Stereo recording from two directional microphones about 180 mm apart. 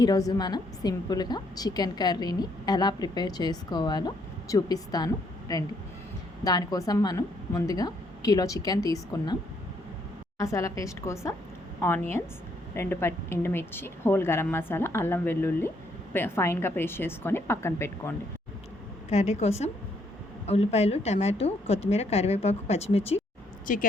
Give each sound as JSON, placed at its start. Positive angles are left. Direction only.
{"t": 0.0, "sound": "a woman's voice", "side_deg": 20}
{"t": 19.1, "sound": "a woman's voice", "side_deg": 40}
{"t": 23.7, "sound": "a woman's voice", "side_deg": 50}